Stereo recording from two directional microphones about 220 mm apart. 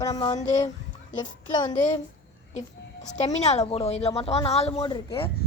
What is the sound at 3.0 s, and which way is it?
A woman's voice, 30° left (ahead or behind).